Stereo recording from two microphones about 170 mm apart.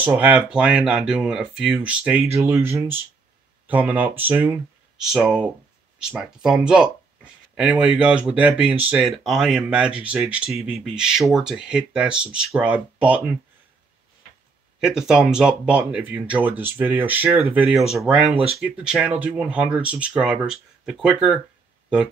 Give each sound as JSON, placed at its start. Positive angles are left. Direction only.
{"t": 0.0, "sound": "speech", "side_deg": -10}
{"t": 14.8, "sound": "speech", "side_deg": -5}
{"t": 18.3, "sound": "speech", "side_deg": -35}
{"t": 18.6, "sound": "speech", "side_deg": -5}